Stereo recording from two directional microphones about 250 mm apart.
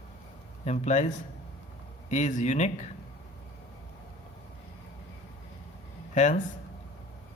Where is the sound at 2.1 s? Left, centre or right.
Left.